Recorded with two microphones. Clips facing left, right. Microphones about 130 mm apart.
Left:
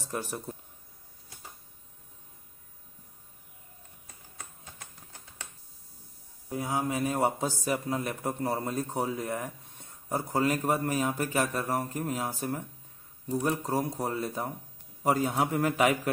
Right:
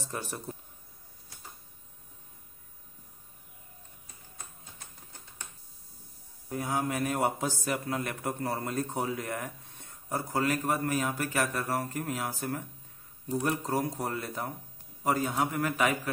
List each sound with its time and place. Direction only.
0.1 s speech: 5° left (ahead or behind)
6.5 s a man's voice: 10° left (ahead or behind)
15.3 s speech: 30° left (ahead or behind)